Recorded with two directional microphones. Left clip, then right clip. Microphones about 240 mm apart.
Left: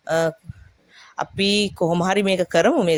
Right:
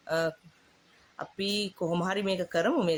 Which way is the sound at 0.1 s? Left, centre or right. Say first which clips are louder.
Left 9 dB; left.